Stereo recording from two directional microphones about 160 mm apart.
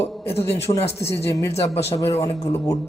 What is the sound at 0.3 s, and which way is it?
Speech, 15° left (ahead or behind).